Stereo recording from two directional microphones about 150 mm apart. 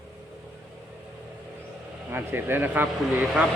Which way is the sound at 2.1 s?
15° right (ahead or behind).